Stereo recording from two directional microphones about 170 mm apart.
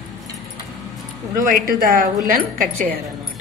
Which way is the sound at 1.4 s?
55° right (ahead or behind).